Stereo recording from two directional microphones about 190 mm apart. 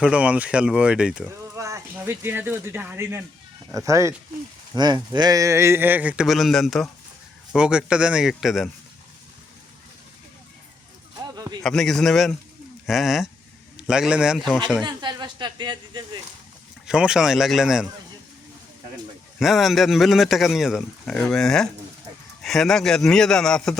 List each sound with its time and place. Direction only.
0.0 s a man's voice: 5° right (ahead or behind)
1.3 s a man's voice: 15° right (ahead or behind)
11.2 s a sound: 20° right (ahead or behind)
11.6 s a man's voice: centre (ahead or behind)
14.8 s speech: 25° right (ahead or behind)
16.8 s a man's voice: 5° right (ahead or behind)
19.4 s a man's voice: centre (ahead or behind)